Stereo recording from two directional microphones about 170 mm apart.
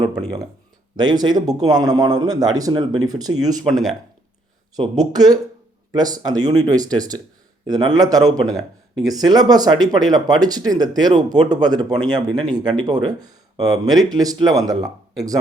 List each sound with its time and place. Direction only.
0.0 s speech: 25° right (ahead or behind)
3.7 s speech: centre (ahead or behind)
4.8 s speech: 25° right (ahead or behind)